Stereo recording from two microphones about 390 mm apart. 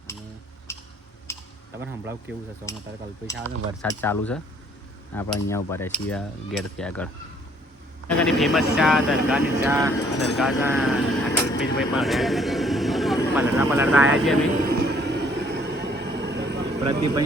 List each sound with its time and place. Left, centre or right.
0.7 s a sound: centre
1.3 s typing: centre
1.7 s cutlery: centre
2.7 s speech: centre
3.8 s cutlery: centre
8.2 s speech: centre
13.4 s cutlery: centre
14.6 s vehicle: right
16.8 s speech: centre